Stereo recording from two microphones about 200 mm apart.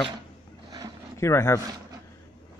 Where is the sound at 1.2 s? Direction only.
15° left (ahead or behind).